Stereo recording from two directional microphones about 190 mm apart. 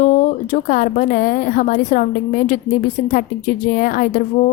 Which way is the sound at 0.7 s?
45° left (ahead or behind).